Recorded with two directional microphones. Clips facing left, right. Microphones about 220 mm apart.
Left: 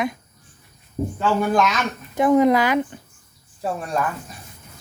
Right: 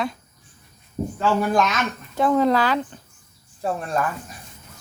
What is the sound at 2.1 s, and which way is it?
Speech, 15° left (ahead or behind).